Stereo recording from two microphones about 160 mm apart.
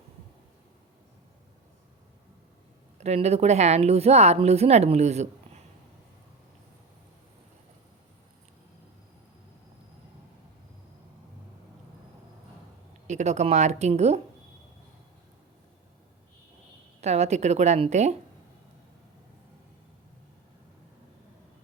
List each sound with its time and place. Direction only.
3.0 s a woman's voice: 40° right (ahead or behind)
13.1 s a woman's voice: 45° right (ahead or behind)
17.0 s a woman's voice: 45° right (ahead or behind)